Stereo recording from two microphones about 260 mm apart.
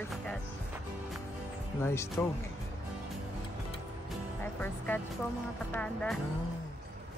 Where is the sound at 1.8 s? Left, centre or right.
Centre.